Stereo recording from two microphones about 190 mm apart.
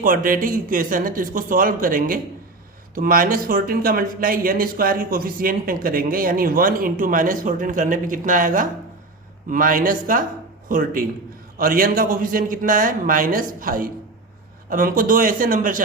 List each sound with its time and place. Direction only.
0.0 s speech: 45° right (ahead or behind)